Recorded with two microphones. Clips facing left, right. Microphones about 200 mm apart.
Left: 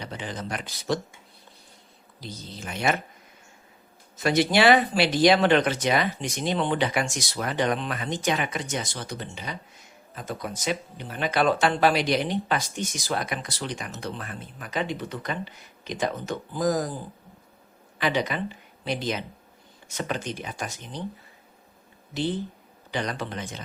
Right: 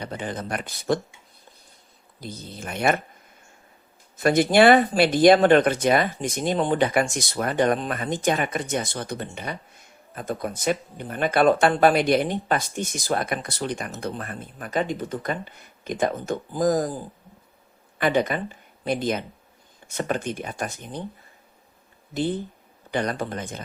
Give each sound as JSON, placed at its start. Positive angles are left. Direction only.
{"t": 0.0, "sound": "speech", "side_deg": -55}
{"t": 2.2, "sound": "speech", "side_deg": -55}
{"t": 4.2, "sound": "speech", "side_deg": -50}
{"t": 22.1, "sound": "speech", "side_deg": -50}